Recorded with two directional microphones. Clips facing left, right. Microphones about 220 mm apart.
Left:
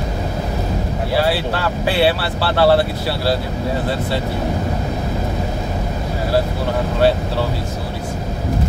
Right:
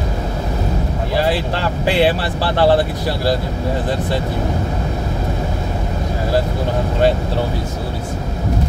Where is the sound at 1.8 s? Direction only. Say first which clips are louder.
Right 2 dB; 15° right (ahead or behind).